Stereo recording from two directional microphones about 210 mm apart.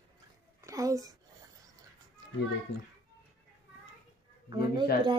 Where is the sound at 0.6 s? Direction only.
15° right (ahead or behind).